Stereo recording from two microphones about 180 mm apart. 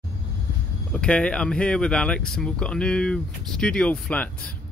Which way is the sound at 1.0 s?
5° left (ahead or behind).